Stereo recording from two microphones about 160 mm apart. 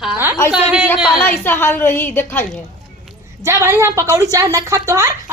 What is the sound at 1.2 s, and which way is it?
A woman's voice, 15° left (ahead or behind).